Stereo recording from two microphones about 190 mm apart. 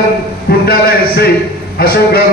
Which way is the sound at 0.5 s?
55° left (ahead or behind).